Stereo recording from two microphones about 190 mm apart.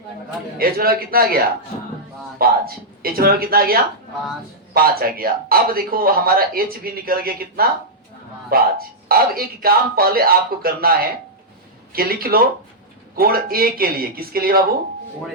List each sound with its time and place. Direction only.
0.6 s speech: 50° right (ahead or behind)
2.4 s speech: 50° right (ahead or behind)
11.9 s speech: 50° right (ahead or behind)